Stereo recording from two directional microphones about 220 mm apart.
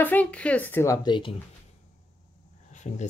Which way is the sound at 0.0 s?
5° left (ahead or behind).